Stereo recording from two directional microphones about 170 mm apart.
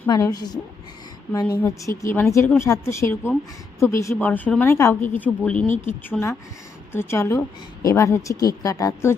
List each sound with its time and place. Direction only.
0.1 s a woman's voice: 20° left (ahead or behind)